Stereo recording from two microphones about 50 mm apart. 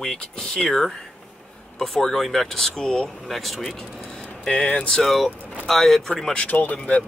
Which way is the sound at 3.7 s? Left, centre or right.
Centre.